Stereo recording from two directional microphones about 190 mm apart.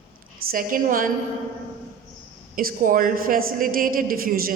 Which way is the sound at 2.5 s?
45° right (ahead or behind).